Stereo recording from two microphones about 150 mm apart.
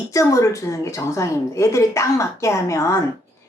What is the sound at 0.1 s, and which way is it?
A woman's voice, 20° left (ahead or behind).